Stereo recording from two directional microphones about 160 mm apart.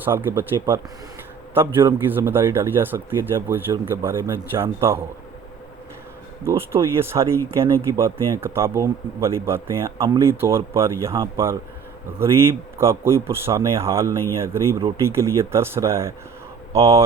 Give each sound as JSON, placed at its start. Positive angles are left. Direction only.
{"t": 0.0, "sound": "speech", "side_deg": -10}
{"t": 6.4, "sound": "speech", "side_deg": -15}